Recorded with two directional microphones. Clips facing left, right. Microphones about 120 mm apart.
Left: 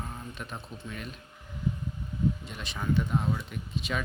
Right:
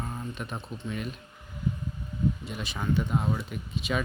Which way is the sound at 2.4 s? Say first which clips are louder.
Right 2 dB; 5° right (ahead or behind).